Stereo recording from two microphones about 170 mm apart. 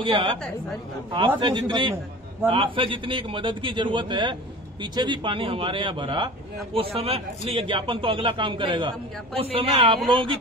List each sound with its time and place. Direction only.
0.0 s a man's voice: 30° right (ahead or behind)
1.4 s a man's voice: 30° right (ahead or behind)